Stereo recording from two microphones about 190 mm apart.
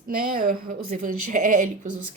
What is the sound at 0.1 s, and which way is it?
A woman's voice, 50° right (ahead or behind).